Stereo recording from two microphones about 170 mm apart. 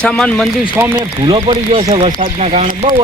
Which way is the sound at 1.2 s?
30° right (ahead or behind).